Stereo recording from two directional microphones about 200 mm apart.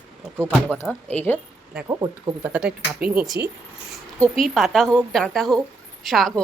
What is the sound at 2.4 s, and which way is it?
A woman's voice, 5° right (ahead or behind).